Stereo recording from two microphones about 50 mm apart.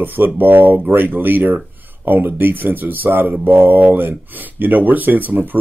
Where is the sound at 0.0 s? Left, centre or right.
Right.